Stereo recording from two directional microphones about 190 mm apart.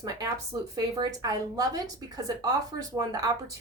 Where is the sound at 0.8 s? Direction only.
20° right (ahead or behind).